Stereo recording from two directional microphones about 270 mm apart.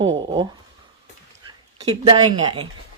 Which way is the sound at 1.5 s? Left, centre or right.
Centre.